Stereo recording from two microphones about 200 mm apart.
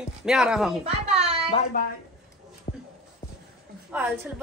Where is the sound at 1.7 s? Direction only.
40° left (ahead or behind).